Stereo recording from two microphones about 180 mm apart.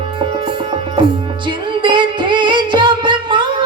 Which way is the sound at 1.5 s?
25° right (ahead or behind).